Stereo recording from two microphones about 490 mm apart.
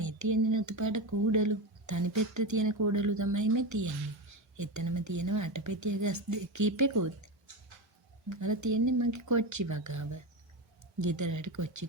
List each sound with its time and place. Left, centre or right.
0.0 s speech: right
8.3 s speech: right